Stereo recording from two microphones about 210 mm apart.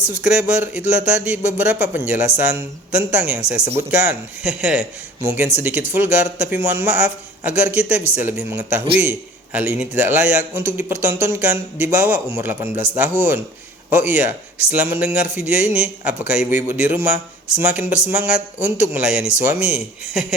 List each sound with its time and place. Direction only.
0.2 s a man's voice: 5° right (ahead or behind)